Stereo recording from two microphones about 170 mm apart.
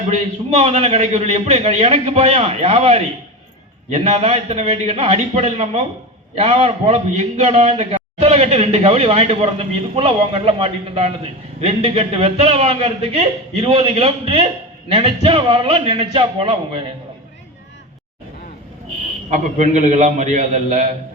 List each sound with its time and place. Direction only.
0.1 s a man's voice: 40° right (ahead or behind)
19.3 s a man's voice: 45° right (ahead or behind)